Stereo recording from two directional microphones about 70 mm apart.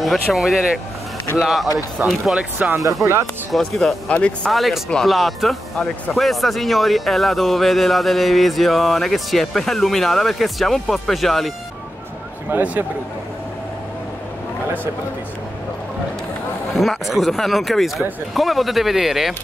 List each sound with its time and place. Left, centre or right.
0.0 s speech: centre
2.0 s speech: right
2.7 s speech: right
3.5 s speech: centre
4.1 s speech: centre
4.5 s speech: centre
12.4 s speech: right
16.7 s speech: centre